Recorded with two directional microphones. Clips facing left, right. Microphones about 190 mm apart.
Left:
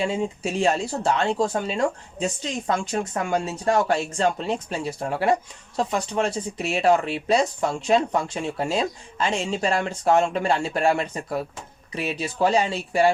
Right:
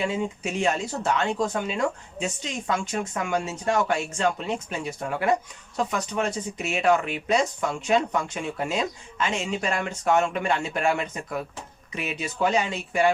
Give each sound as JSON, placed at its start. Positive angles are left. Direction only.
{"t": 0.0, "sound": "speech", "side_deg": 35}